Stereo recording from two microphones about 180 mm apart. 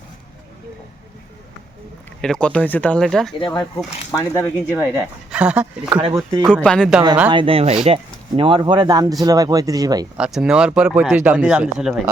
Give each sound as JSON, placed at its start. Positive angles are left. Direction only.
{"t": 2.2, "sound": "speech", "side_deg": 5}
{"t": 3.4, "sound": "speech", "side_deg": 20}
{"t": 4.7, "sound": "speech", "side_deg": -10}
{"t": 6.5, "sound": "speech", "side_deg": 5}
{"t": 7.3, "sound": "speech", "side_deg": -30}
{"t": 10.2, "sound": "speech", "side_deg": -5}